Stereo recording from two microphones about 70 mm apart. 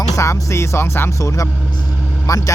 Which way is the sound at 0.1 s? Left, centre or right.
Left.